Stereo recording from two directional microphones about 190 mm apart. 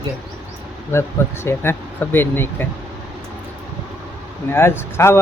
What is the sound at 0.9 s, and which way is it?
Speech, 15° left (ahead or behind).